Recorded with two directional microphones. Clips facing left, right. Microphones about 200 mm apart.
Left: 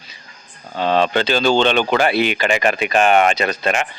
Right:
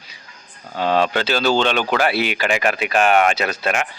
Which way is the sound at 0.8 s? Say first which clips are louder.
Left 2 dB; 10° right (ahead or behind).